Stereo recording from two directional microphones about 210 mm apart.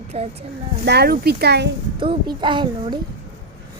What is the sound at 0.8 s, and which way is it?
Speech, 50° right (ahead or behind).